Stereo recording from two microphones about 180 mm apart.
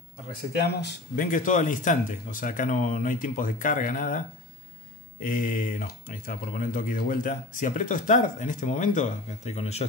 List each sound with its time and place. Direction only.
0.6 s speech: 60° left (ahead or behind)
1.2 s speech: 45° left (ahead or behind)
5.2 s speech: 50° left (ahead or behind)